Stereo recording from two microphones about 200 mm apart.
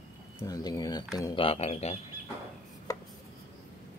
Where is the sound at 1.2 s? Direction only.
20° left (ahead or behind).